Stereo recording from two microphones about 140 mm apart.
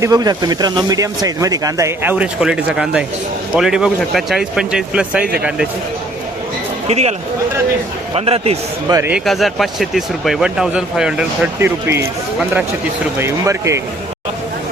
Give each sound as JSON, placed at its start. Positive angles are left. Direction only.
{"t": 0.0, "sound": "speech", "side_deg": -25}
{"t": 6.8, "sound": "speech", "side_deg": -50}
{"t": 8.1, "sound": "speech", "side_deg": -45}
{"t": 9.2, "sound": "speech", "side_deg": 0}
{"t": 11.6, "sound": "speech", "side_deg": -15}
{"t": 13.1, "sound": "speech", "side_deg": -20}